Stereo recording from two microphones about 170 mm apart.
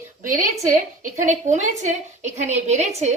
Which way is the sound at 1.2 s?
45° right (ahead or behind).